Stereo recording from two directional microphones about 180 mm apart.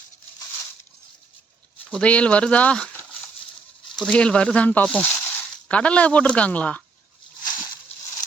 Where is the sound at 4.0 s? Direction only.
5° left (ahead or behind).